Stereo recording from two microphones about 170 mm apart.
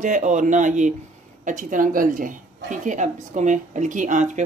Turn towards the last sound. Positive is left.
turn(degrees=-45)  # may be behind; listen again after turning